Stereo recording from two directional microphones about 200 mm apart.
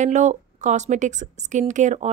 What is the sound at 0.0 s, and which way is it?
A woman's voice, 35° right (ahead or behind).